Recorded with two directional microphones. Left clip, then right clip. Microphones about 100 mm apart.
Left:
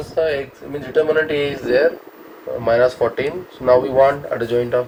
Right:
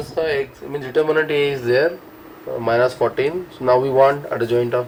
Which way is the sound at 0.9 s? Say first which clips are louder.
Left 1 dB; 25° left (ahead or behind).